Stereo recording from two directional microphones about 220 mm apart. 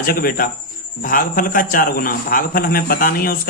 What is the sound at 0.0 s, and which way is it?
A man's voice, 40° left (ahead or behind).